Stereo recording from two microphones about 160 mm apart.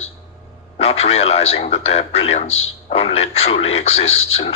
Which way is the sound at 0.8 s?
40° left (ahead or behind).